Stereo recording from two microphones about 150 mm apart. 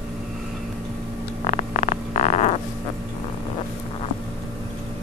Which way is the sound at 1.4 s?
45° left (ahead or behind).